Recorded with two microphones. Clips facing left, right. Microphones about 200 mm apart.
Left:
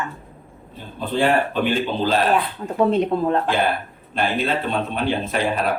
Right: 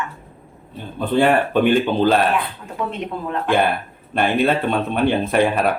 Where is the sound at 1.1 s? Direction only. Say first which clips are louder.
Right 3 dB; 55° right (ahead or behind).